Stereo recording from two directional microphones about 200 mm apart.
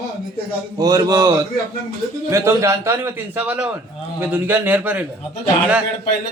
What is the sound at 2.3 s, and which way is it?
Speech, 15° right (ahead or behind).